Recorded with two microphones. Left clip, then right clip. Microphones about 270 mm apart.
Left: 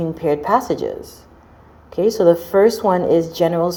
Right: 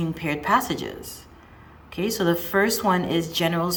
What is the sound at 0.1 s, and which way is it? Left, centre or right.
Speech, centre.